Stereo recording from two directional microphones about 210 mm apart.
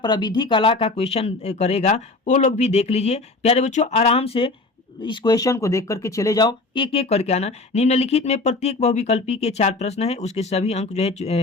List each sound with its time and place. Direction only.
0.0 s speech: 20° left (ahead or behind)